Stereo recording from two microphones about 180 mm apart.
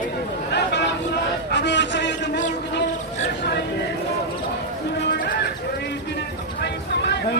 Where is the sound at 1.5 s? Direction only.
75° left (ahead or behind).